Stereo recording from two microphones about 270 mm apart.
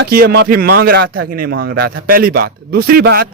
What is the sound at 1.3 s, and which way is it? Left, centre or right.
A man's voice, right.